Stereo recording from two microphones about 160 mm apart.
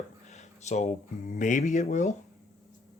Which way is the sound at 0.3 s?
45° left (ahead or behind).